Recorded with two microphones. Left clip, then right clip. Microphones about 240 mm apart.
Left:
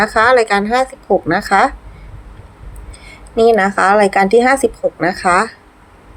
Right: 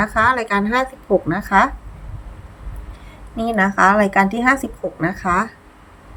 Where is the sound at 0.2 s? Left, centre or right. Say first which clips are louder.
Left 5 dB; left.